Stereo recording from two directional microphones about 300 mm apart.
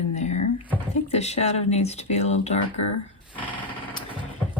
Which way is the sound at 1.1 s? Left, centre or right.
Left.